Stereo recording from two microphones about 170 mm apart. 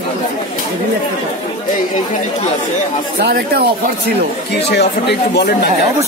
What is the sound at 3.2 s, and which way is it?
Speech, 70° right (ahead or behind).